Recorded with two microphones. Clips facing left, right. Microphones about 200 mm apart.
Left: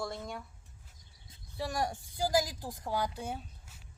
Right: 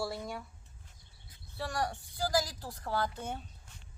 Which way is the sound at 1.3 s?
15° left (ahead or behind).